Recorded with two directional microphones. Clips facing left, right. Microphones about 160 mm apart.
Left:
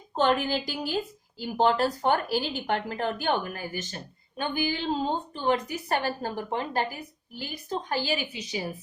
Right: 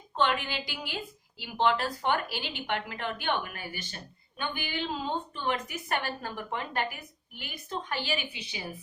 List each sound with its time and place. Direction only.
0.2 s a woman's voice: 40° left (ahead or behind)